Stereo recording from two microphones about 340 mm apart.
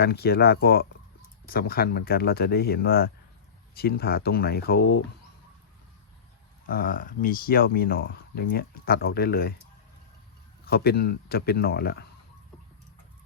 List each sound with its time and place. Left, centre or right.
0.0 s speech: left
6.7 s speech: left
10.7 s speech: left